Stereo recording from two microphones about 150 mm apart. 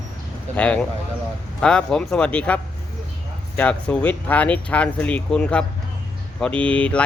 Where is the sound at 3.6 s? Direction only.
5° left (ahead or behind).